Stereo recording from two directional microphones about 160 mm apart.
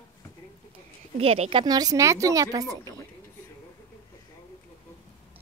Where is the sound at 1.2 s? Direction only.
40° right (ahead or behind); by 2.6 s 25° right (ahead or behind).